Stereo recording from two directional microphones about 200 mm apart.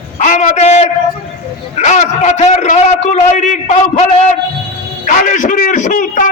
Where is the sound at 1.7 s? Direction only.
35° left (ahead or behind).